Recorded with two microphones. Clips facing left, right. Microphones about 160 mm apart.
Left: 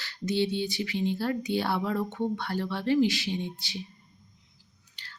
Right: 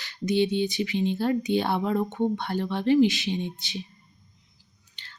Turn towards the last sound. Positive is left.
turn(degrees=-20)  # may be behind; listen again after turning